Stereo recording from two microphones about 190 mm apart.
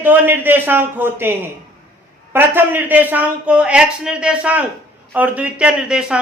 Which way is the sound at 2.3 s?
10° right (ahead or behind).